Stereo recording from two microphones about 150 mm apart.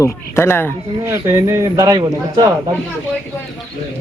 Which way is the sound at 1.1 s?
20° right (ahead or behind).